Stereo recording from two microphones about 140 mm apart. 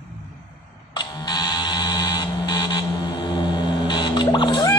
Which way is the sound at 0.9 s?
30° left (ahead or behind).